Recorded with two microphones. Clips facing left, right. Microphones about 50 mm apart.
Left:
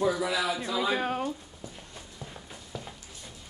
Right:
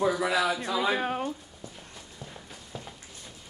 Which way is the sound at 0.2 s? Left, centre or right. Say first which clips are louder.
Right 3 dB; right.